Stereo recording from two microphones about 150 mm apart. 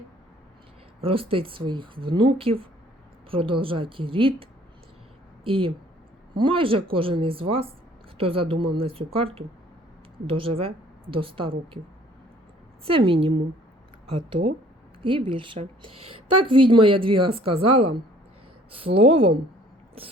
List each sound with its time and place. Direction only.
1.0 s a woman's voice: 40° right (ahead or behind)
5.5 s a woman's voice: 35° right (ahead or behind)
12.8 s a woman's voice: 35° right (ahead or behind)
18.7 s a woman's voice: 40° right (ahead or behind)